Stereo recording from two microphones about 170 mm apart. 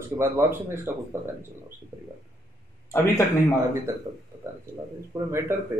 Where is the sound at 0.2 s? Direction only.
15° right (ahead or behind).